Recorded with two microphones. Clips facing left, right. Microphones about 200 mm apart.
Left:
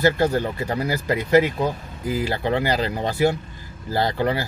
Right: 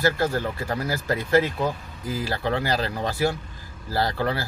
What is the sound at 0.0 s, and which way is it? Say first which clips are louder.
Speech: left 4 dB; 20° left (ahead or behind).